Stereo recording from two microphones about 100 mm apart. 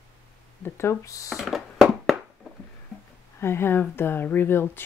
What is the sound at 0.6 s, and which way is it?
Speech, 25° left (ahead or behind).